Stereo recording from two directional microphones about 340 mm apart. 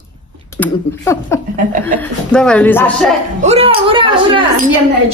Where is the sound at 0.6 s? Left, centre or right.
Centre.